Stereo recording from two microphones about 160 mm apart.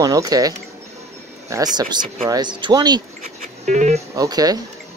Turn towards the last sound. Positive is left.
turn(degrees=-25)  # may be behind; listen again after turning